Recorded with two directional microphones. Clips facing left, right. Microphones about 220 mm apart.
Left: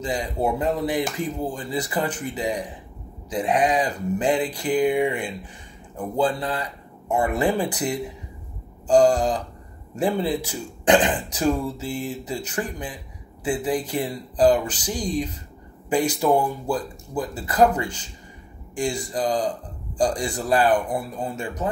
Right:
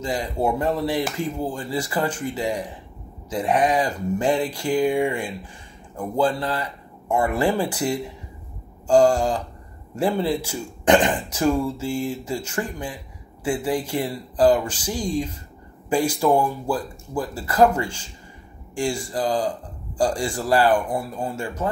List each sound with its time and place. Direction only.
0.0 s speech: 15° left (ahead or behind)